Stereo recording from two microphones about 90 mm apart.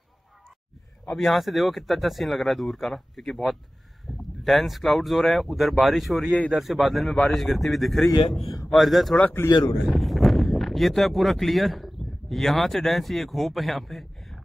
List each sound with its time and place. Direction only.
1.0 s speech: 5° left (ahead or behind)
4.1 s a sound: centre (ahead or behind)
4.5 s speech: centre (ahead or behind)
9.2 s a man's voice: 25° left (ahead or behind)
9.8 s speech: centre (ahead or behind)